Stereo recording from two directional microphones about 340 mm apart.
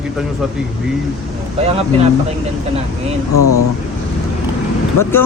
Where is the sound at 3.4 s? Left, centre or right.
Left.